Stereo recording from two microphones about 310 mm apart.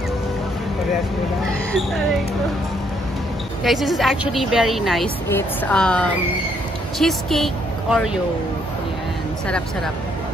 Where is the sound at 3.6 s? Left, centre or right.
Centre.